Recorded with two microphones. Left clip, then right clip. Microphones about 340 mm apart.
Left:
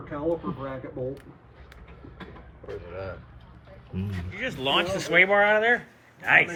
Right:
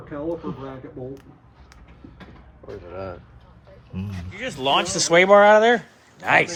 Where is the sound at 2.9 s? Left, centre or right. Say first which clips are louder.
Right 4 dB; right.